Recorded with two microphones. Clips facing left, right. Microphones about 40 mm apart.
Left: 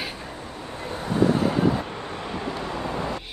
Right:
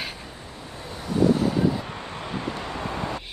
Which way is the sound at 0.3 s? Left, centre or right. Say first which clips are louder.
Left 4 dB; left.